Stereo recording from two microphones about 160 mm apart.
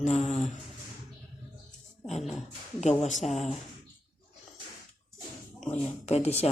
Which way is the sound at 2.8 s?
45° left (ahead or behind).